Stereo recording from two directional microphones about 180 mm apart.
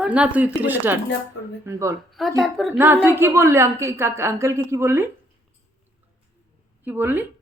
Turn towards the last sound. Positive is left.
turn(degrees=-10)  # may be behind; listen again after turning